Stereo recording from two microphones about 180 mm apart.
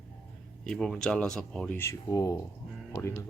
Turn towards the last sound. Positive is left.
turn(degrees=15)  # may be behind; listen again after turning